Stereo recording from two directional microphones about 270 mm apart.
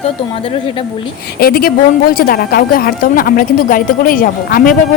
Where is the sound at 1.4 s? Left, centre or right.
Left.